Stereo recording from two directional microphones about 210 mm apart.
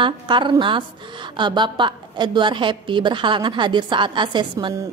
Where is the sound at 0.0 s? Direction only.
20° right (ahead or behind).